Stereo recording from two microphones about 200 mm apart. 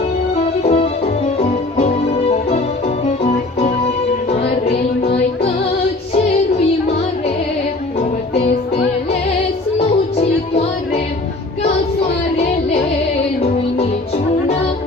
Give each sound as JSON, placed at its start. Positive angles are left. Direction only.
{"t": 0.7, "sound": "music", "side_deg": 30}
{"t": 5.0, "sound": "music", "side_deg": 30}